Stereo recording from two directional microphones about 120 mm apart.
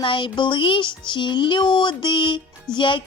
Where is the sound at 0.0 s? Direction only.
45° left (ahead or behind).